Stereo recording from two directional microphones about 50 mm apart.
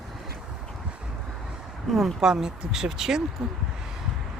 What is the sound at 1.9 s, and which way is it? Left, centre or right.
Speech, centre.